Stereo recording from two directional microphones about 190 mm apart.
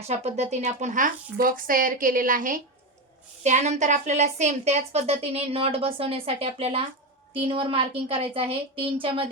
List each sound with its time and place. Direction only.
0.1 s a woman's voice: 35° right (ahead or behind)